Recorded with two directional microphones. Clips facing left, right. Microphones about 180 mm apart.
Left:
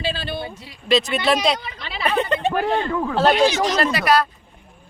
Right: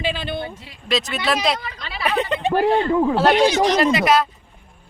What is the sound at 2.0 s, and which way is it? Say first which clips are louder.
Speech: left 1 dB; 15° right (ahead or behind).